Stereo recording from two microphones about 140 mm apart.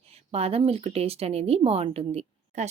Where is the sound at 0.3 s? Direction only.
45° right (ahead or behind).